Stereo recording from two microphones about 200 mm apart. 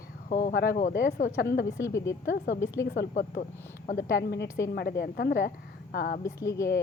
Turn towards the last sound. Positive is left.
turn(degrees=15)  # may be behind; listen again after turning